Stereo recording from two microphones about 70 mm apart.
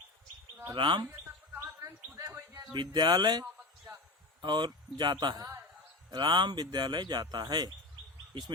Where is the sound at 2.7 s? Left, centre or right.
Right.